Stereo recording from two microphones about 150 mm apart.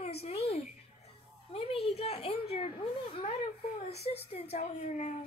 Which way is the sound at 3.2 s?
45° left (ahead or behind).